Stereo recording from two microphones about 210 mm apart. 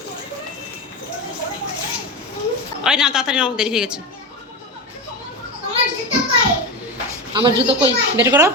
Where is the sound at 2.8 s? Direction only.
5° right (ahead or behind).